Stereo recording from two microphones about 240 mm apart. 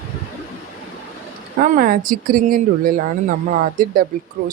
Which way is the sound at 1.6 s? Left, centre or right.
Right.